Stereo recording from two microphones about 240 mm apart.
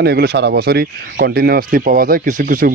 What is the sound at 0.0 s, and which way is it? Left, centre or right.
Speech, right.